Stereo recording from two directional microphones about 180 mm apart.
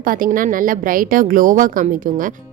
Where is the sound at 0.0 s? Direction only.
50° right (ahead or behind).